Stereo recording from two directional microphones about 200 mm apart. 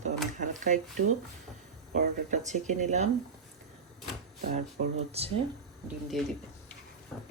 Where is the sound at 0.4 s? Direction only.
40° right (ahead or behind).